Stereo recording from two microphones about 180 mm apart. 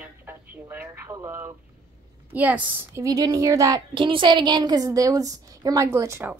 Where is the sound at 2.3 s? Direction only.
10° right (ahead or behind).